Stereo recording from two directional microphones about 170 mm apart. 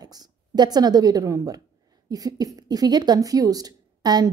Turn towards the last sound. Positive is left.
turn(degrees=-20)  # may be behind; listen again after turning